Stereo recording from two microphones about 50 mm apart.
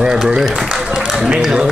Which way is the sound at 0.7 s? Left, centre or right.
Centre.